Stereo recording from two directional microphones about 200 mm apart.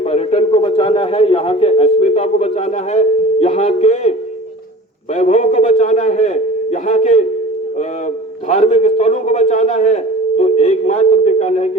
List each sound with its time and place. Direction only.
0.0 s a man's voice: 30° left (ahead or behind)
5.1 s a man's voice: 35° left (ahead or behind)
8.4 s a man's voice: 30° left (ahead or behind)